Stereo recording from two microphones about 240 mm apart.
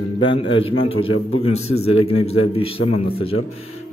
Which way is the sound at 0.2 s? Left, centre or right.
Left.